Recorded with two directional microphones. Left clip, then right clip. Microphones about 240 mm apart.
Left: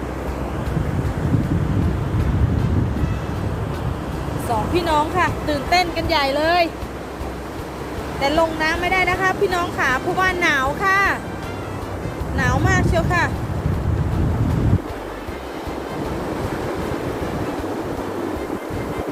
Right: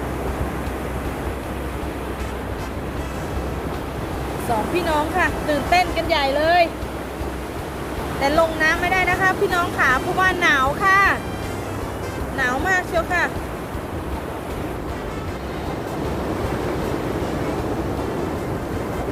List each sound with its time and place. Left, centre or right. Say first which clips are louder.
4.7 s speech: left 4 dB; centre
8.2 s speech: right 1 dB; centre
12.4 s speech: even; centre